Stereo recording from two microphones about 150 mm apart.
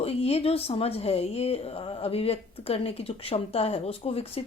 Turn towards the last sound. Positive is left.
turn(degrees=40)  # may be behind; listen again after turning